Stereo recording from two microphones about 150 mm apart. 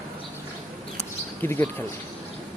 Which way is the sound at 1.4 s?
15° left (ahead or behind).